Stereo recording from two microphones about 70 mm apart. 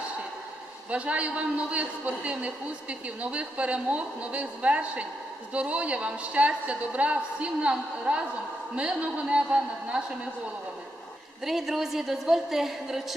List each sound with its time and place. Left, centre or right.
0.9 s a woman's voice: centre
11.4 s a woman's voice: centre